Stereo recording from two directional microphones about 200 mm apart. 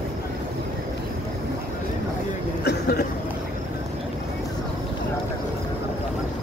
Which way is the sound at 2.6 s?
50° left (ahead or behind).